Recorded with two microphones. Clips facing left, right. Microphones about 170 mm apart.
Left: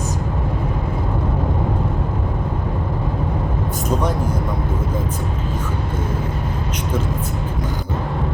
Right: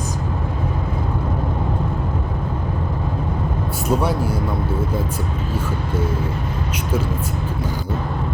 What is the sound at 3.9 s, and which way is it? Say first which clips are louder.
Speech: right 2 dB; 10° right (ahead or behind).